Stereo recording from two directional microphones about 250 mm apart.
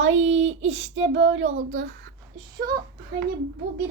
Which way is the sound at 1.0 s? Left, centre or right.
Right.